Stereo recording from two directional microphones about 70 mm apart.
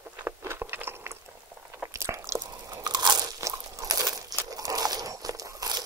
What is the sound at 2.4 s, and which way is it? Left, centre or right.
Crunch, right.